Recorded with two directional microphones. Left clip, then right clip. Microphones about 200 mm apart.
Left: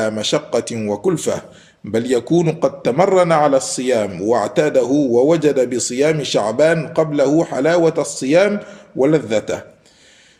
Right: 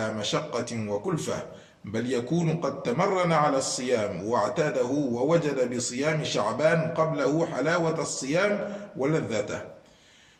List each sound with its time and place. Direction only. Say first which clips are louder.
0.0 s a man's voice: left 10 dB; 55° left (ahead or behind)